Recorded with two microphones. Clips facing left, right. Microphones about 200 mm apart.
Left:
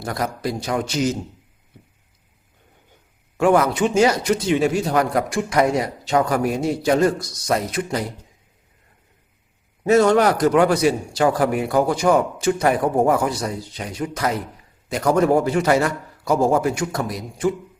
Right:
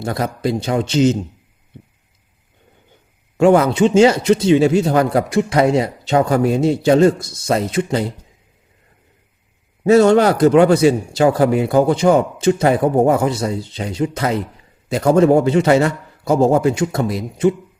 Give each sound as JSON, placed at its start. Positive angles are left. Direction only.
{"t": 0.0, "sound": "speech", "side_deg": -25}
{"t": 3.3, "sound": "speech", "side_deg": -25}
{"t": 9.8, "sound": "speech", "side_deg": -30}